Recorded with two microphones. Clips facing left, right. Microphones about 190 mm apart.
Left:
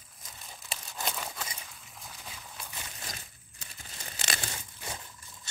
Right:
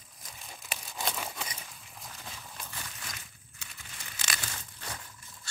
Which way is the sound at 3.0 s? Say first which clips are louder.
Left 2 dB; 35° left (ahead or behind).